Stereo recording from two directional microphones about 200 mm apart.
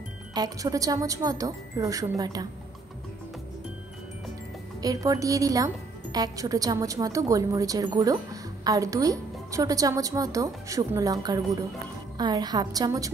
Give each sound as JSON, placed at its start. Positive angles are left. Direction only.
{"t": 0.3, "sound": "a woman's voice", "side_deg": -20}
{"t": 4.8, "sound": "a woman's voice", "side_deg": -15}